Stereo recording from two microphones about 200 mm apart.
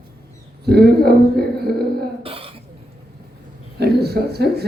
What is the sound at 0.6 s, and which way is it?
Speech, 55° right (ahead or behind).